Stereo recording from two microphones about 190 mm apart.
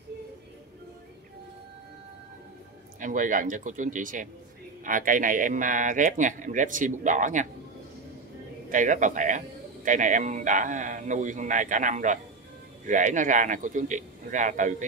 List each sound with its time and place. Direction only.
3.0 s a man's voice: 45° right (ahead or behind)
8.6 s speech: 40° right (ahead or behind)